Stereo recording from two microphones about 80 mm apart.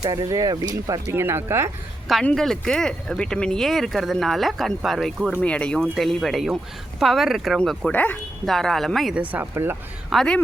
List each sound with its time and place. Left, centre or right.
0.0 s speech: right
1.0 s speech: right
2.3 s speech: centre
5.3 s speech: centre
6.0 s speech: centre
7.9 s speech: left
8.4 s speech: centre
9.1 s speech: centre
9.4 s speech: right
10.1 s speech: centre